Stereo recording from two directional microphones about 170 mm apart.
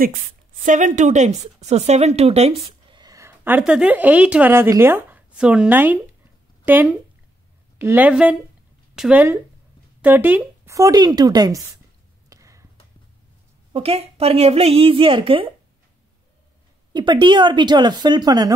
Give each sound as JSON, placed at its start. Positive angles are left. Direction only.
{"t": 0.7, "sound": "speech", "side_deg": -45}
{"t": 3.0, "sound": "a woman's voice", "side_deg": -20}
{"t": 12.3, "sound": "a sound", "side_deg": -20}
{"t": 13.7, "sound": "speech", "side_deg": -35}
{"t": 16.9, "sound": "speech", "side_deg": -25}